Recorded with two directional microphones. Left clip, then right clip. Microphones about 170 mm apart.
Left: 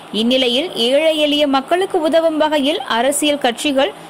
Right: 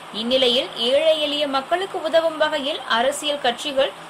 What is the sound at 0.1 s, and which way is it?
A woman's voice, 45° left (ahead or behind).